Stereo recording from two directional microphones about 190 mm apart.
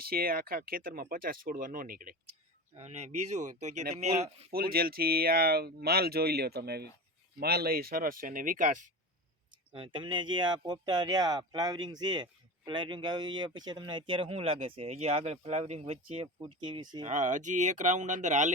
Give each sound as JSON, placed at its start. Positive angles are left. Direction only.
{"t": 0.0, "sound": "speech", "side_deg": -50}
{"t": 2.7, "sound": "speech", "side_deg": -35}
{"t": 4.5, "sound": "speech", "side_deg": -50}
{"t": 9.7, "sound": "speech", "side_deg": -25}
{"t": 17.0, "sound": "speech", "side_deg": -40}